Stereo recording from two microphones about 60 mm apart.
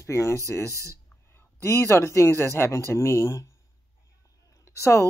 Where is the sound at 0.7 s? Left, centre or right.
Right.